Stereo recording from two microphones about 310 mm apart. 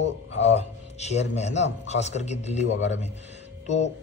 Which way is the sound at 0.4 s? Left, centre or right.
Left.